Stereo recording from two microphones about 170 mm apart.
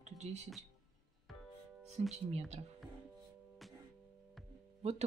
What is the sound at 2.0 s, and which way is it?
Speech, 40° right (ahead or behind).